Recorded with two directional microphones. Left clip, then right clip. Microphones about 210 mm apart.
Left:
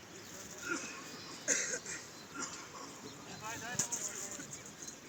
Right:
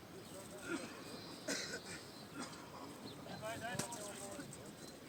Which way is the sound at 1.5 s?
50° right (ahead or behind).